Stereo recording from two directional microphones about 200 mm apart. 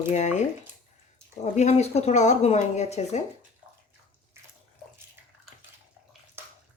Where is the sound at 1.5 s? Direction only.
35° left (ahead or behind).